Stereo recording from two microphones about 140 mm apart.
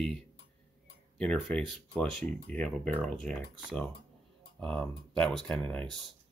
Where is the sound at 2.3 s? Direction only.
10° left (ahead or behind).